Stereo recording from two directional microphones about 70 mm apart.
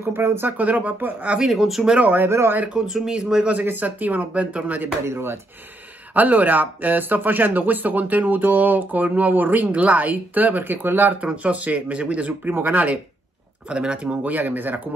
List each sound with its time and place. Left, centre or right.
0.0 s speech: right
1.3 s speech: centre
2.0 s speech: right
2.2 s speech: right
2.9 s speech: centre
3.4 s speech: right
5.0 s speech: right
6.1 s speech: right
11.1 s speech: centre